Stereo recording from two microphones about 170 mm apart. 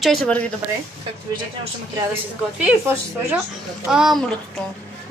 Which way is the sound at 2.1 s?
10° right (ahead or behind).